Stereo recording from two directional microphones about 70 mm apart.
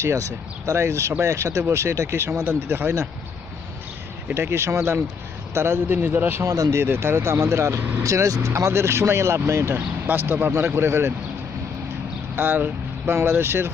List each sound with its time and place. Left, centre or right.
0.7 s speech: right
4.3 s speech: right
6.4 s speech: right
12.4 s speech: right